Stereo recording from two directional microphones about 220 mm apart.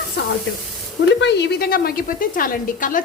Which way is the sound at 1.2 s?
50° left (ahead or behind).